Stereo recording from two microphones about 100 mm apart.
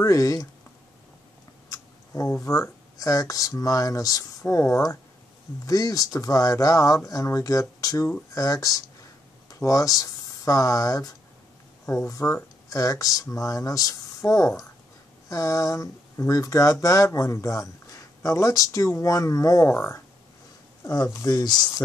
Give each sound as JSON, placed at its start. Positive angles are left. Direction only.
{"t": 0.0, "sound": "speech", "side_deg": 35}
{"t": 1.7, "sound": "speech", "side_deg": 35}
{"t": 12.1, "sound": "speech", "side_deg": 35}
{"t": 21.1, "sound": "speech", "side_deg": 35}